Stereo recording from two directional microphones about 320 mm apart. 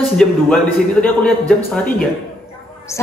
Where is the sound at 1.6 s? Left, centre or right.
Left.